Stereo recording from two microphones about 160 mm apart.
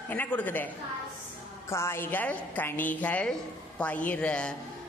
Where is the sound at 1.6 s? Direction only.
15° left (ahead or behind).